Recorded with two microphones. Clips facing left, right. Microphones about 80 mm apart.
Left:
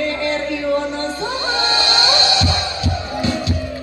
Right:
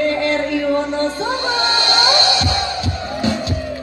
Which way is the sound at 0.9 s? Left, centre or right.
Right.